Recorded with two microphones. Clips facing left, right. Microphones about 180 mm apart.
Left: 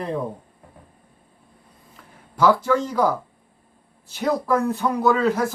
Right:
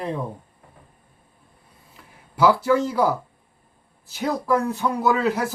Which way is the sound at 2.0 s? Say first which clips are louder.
Even; 10° right (ahead or behind).